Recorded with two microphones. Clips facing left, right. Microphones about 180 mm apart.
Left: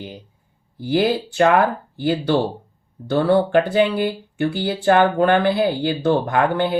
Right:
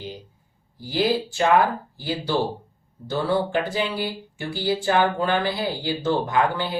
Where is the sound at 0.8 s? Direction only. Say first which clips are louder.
Left 4 dB; 60° left (ahead or behind).